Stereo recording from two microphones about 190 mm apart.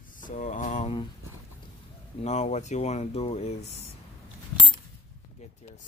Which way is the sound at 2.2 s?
35° left (ahead or behind).